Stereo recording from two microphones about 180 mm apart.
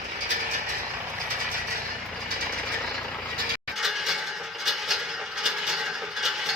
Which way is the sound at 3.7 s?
Centre (ahead or behind).